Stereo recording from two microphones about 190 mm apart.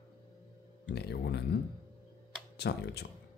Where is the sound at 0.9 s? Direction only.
60° left (ahead or behind).